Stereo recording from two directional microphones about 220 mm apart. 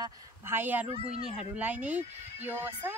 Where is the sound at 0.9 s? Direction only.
25° right (ahead or behind).